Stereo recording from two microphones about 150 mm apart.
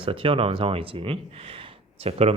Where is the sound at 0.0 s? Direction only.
35° right (ahead or behind).